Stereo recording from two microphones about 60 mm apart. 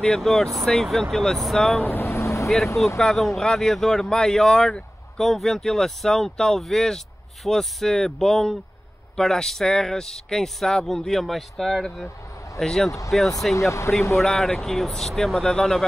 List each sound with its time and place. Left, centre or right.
0.0 s speech: centre
1.9 s vehicle: left
3.0 s speech: centre
13.6 s speech: left
14.1 s speech: centre